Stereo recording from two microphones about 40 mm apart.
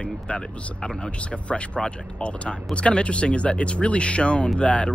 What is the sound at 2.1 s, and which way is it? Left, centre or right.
Speech, left.